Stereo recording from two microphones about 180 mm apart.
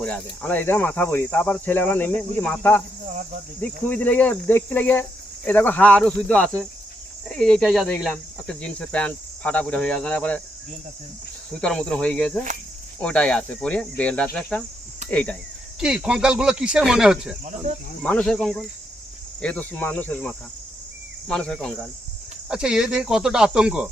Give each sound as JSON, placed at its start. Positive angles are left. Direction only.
{"t": 0.0, "sound": "speech", "side_deg": 10}
{"t": 11.6, "sound": "speech", "side_deg": 5}
{"t": 15.8, "sound": "speech", "side_deg": -5}
{"t": 17.4, "sound": "speech", "side_deg": -40}
{"t": 18.0, "sound": "speech", "side_deg": 5}